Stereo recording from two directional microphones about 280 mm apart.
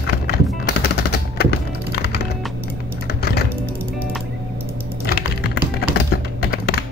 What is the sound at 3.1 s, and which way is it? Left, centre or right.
Typing, left.